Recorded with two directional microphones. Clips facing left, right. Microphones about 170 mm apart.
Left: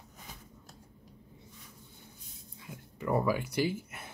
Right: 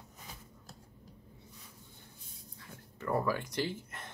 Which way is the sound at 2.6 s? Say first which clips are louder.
Left 4 dB; 15° left (ahead or behind).